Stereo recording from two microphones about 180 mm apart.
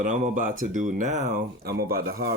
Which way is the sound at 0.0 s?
45° right (ahead or behind).